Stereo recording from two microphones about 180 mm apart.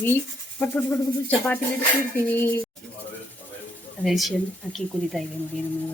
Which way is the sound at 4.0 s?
Centre (ahead or behind).